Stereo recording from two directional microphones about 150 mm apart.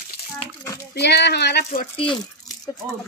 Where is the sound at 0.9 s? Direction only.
90° left.